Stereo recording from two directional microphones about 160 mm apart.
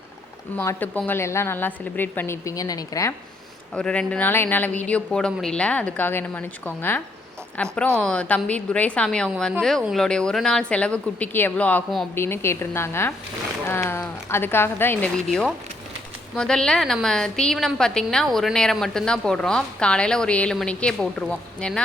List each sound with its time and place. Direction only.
0.5 s speech: 15° left (ahead or behind)
3.8 s a woman's voice: 5° left (ahead or behind)
15.3 s a woman's voice: centre (ahead or behind)